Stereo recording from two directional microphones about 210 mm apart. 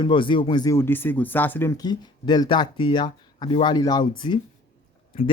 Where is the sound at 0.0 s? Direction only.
25° left (ahead or behind).